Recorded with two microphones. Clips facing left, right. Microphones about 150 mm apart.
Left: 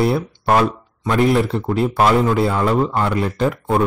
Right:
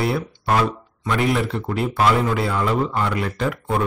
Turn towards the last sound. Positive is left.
turn(degrees=35)  # may be behind; listen again after turning